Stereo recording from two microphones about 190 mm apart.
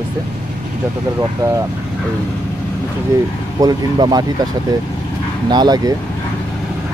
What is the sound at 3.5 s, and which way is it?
Speech, 20° right (ahead or behind).